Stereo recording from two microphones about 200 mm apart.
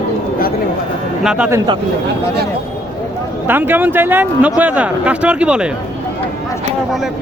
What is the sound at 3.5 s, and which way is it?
Speech, 10° right (ahead or behind).